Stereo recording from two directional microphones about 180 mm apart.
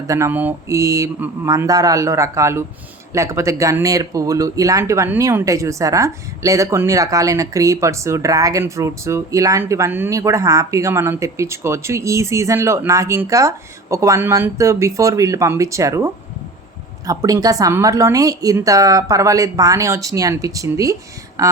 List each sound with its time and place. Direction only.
0.1 s a woman's voice: 15° right (ahead or behind)